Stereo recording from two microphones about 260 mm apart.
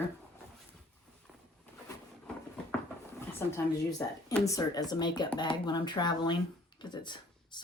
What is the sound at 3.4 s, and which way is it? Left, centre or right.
Speech, centre.